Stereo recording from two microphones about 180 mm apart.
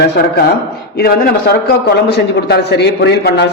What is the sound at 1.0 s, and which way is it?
A man's voice, 60° left (ahead or behind).